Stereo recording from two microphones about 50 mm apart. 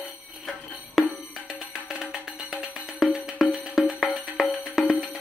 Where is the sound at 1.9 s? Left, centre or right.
Right.